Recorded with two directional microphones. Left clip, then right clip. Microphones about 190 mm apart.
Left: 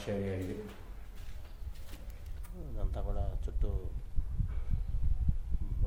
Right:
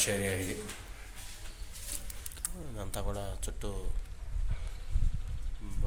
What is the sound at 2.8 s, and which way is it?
Speech, 20° right (ahead or behind).